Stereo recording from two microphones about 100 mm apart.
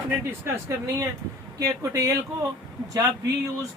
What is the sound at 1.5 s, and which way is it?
Speech, 35° right (ahead or behind).